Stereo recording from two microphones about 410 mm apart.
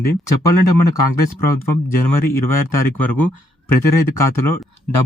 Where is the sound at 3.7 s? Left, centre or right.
Left.